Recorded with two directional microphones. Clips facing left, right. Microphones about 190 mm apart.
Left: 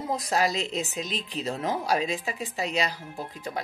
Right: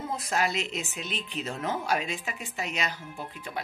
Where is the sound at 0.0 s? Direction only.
35° left (ahead or behind).